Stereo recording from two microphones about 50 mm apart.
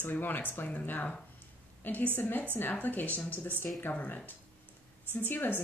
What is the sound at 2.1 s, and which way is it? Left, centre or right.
A woman's voice, left.